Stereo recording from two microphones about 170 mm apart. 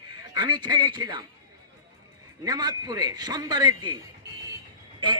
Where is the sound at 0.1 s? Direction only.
25° right (ahead or behind).